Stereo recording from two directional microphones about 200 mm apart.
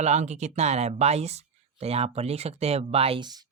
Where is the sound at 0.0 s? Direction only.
35° right (ahead or behind).